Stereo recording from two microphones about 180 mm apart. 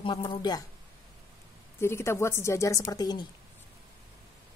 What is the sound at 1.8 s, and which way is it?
A woman's voice, 15° left (ahead or behind).